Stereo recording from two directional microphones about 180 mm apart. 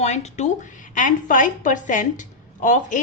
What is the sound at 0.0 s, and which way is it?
A woman's voice, 40° left (ahead or behind).